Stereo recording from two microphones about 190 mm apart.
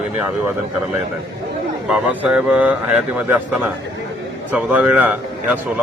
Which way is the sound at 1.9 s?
5° right (ahead or behind).